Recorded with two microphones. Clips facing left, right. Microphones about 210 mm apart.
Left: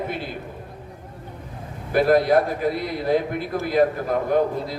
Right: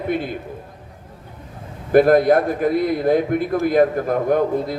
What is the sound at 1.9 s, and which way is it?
A man's voice, 50° right (ahead or behind).